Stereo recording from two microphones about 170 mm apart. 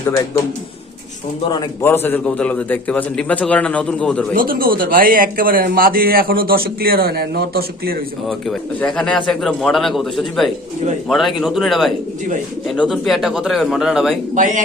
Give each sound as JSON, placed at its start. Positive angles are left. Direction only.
{"t": 1.8, "sound": "a man's voice", "side_deg": 10}
{"t": 4.4, "sound": "speech", "side_deg": -60}
{"t": 8.3, "sound": "speech", "side_deg": 0}
{"t": 14.3, "sound": "speech", "side_deg": -45}